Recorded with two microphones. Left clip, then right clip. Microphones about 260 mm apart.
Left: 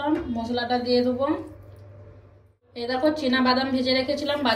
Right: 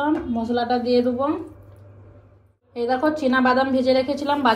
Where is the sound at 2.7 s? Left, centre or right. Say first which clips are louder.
Right 3 dB; centre.